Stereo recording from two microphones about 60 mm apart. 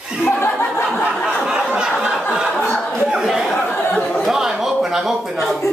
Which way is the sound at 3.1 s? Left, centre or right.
Centre.